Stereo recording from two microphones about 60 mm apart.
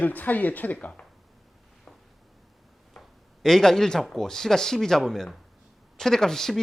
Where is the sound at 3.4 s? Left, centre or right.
Centre.